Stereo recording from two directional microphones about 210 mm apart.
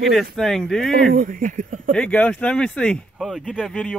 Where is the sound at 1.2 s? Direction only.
40° right (ahead or behind).